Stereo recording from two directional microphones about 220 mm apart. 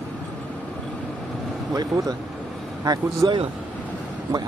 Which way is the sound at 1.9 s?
15° right (ahead or behind).